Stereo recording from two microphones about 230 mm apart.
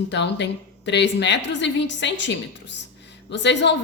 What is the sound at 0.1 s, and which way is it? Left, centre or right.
A woman's voice, left.